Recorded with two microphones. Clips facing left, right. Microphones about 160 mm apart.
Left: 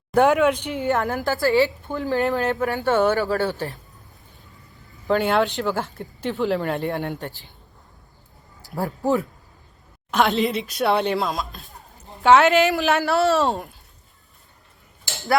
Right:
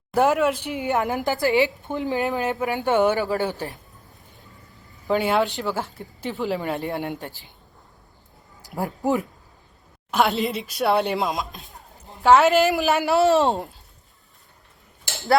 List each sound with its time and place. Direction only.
0.1 s a woman's voice: 5° right (ahead or behind); by 2.2 s 20° right (ahead or behind)
2.2 s speech: centre (ahead or behind)
2.5 s a woman's voice: 15° right (ahead or behind)
5.0 s a woman's voice: centre (ahead or behind)
8.6 s a woman's voice: 15° right (ahead or behind)
10.1 s speech: 5° right (ahead or behind)
11.2 s a woman's voice: 20° right (ahead or behind)
12.0 s a woman's voice: centre (ahead or behind)
13.0 s a woman's voice: 20° right (ahead or behind)